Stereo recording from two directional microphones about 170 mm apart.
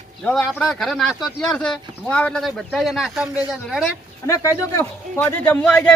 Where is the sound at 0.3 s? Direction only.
10° left (ahead or behind).